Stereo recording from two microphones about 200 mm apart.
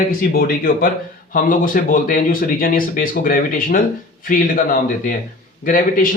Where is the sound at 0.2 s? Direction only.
45° left (ahead or behind).